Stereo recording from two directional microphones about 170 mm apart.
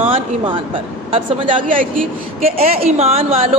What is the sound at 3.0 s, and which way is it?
Speech, 35° right (ahead or behind).